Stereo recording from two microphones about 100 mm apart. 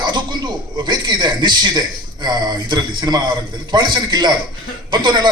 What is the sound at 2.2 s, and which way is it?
A man's voice, 45° right (ahead or behind).